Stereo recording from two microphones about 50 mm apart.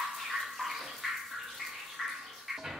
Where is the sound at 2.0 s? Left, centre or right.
Centre.